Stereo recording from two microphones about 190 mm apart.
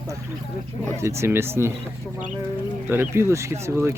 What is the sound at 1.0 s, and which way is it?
Speech, 15° right (ahead or behind).